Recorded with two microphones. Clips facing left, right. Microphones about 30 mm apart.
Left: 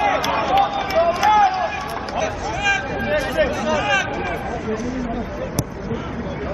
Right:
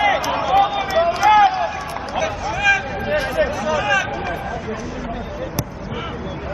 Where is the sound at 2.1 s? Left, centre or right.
Centre.